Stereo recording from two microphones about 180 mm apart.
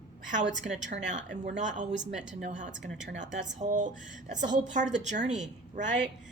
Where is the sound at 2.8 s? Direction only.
85° right.